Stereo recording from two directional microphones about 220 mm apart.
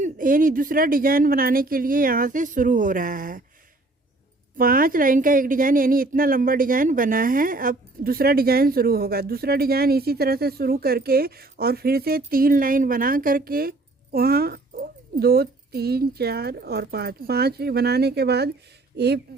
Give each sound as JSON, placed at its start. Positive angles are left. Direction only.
{"t": 0.0, "sound": "speech", "side_deg": -40}
{"t": 4.5, "sound": "a woman's voice", "side_deg": -40}